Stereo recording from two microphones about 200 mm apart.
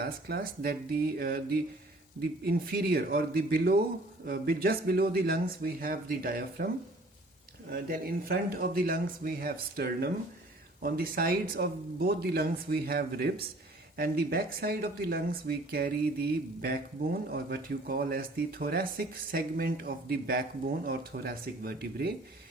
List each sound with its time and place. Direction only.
0.0 s speech: 50° right (ahead or behind)
7.7 s speech: 45° right (ahead or behind)